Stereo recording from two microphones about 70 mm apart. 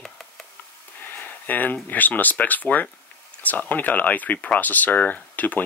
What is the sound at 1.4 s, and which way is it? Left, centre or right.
Speech, left.